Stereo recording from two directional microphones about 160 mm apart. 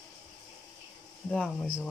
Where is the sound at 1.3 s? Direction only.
5° left (ahead or behind).